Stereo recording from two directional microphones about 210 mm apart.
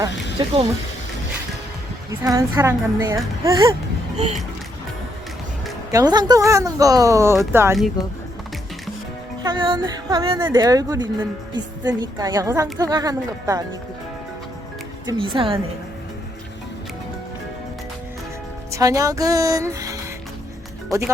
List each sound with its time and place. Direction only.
0.3 s speech: 25° right (ahead or behind)
2.0 s speech: 15° right (ahead or behind)
5.9 s speech: 20° right (ahead or behind)
9.4 s speech: 20° right (ahead or behind)
15.0 s speech: 25° right (ahead or behind)
18.7 s speech: 15° right (ahead or behind)